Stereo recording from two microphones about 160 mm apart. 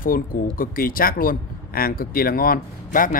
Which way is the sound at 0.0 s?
60° left (ahead or behind).